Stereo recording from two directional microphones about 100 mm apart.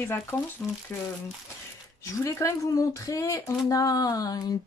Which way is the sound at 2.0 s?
30° left (ahead or behind).